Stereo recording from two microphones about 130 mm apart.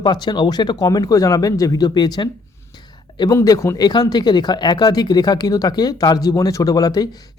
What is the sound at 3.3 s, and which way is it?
Speech, 25° left (ahead or behind).